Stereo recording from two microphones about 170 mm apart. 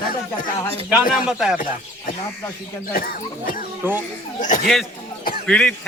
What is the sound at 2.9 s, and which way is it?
Speech, 55° left (ahead or behind).